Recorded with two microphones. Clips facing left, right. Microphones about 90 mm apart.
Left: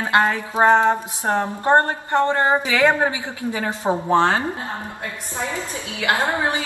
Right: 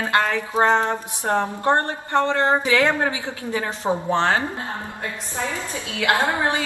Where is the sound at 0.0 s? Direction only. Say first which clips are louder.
Left 2 dB; 20° left (ahead or behind).